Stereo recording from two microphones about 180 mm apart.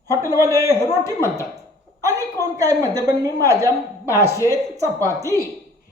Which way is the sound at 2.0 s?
15° right (ahead or behind).